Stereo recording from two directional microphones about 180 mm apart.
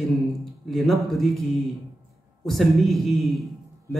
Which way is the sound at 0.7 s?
Centre (ahead or behind).